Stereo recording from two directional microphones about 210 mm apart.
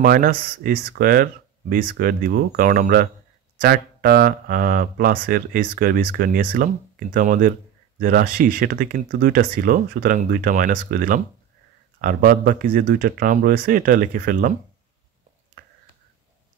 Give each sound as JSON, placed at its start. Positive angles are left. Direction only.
{"t": 0.0, "sound": "speech", "side_deg": -45}